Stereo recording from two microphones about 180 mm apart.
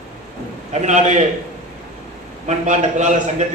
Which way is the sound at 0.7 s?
40° right (ahead or behind).